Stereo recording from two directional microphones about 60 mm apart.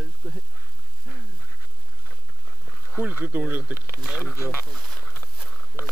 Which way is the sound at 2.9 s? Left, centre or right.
Right.